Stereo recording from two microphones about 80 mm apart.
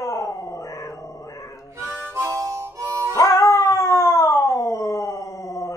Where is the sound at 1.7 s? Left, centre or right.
Right.